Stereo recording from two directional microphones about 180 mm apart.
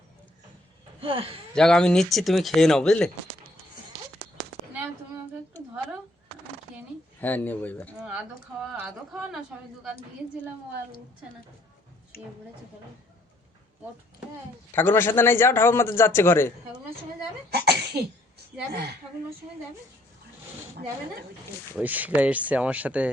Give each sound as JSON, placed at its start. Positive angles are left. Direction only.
{"t": 1.0, "sound": "speech", "side_deg": -30}
{"t": 1.5, "sound": "speech", "side_deg": 5}
{"t": 7.2, "sound": "a man's voice", "side_deg": 10}
{"t": 14.8, "sound": "a man's voice", "side_deg": 10}
{"t": 17.5, "sound": "a woman's voice", "side_deg": -65}
{"t": 21.8, "sound": "speech", "side_deg": -10}